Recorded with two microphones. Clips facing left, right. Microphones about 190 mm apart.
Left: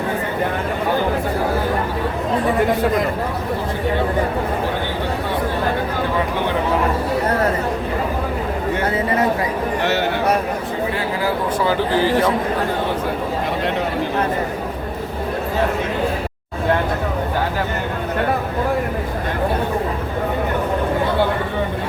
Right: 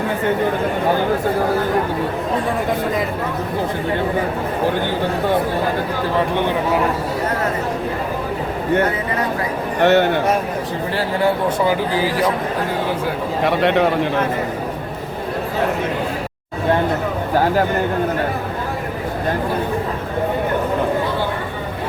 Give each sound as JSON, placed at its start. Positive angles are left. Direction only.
{"t": 9.8, "sound": "speech", "side_deg": -60}